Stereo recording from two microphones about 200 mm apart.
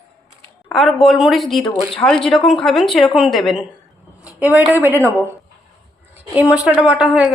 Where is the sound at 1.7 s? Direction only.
25° left (ahead or behind).